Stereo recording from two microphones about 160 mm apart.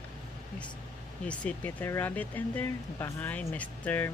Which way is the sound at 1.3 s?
10° left (ahead or behind).